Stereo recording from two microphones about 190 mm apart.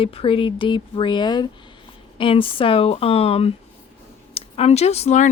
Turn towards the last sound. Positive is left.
turn(degrees=35)  # may be behind; listen again after turning